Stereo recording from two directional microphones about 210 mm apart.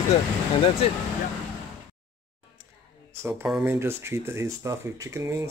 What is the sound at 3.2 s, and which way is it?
Speech, 10° right (ahead or behind).